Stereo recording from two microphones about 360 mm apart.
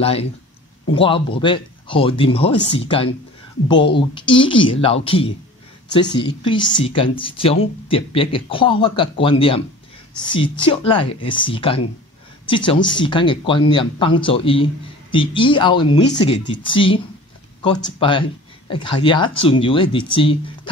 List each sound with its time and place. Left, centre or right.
0.0 s speech: centre